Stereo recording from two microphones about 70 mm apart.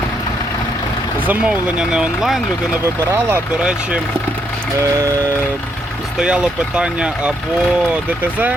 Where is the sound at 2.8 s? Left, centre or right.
Right.